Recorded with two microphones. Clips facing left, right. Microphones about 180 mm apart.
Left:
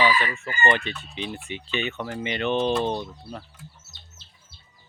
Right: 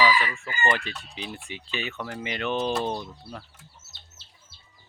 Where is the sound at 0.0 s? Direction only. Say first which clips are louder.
Even; 25° left (ahead or behind).